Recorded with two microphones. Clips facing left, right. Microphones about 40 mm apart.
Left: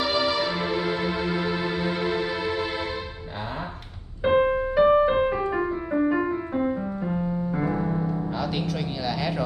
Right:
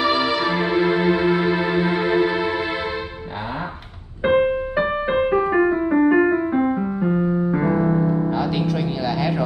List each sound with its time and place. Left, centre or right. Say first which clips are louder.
0.0 s music: right 4 dB; centre
0.5 s music: right 7 dB; right
4.2 s music: right 3 dB; right
6.6 s piano: right 6 dB; right
8.3 s music: right 6 dB; centre